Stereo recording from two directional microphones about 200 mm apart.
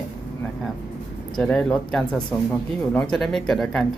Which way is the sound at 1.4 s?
5° left (ahead or behind).